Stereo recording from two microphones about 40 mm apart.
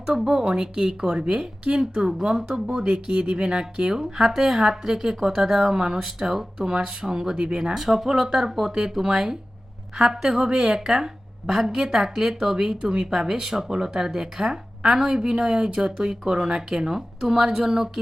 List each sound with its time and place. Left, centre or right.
0.0 s speech: centre
12.8 s speech: centre